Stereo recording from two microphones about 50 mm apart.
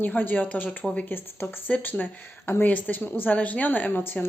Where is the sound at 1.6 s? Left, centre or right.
Left.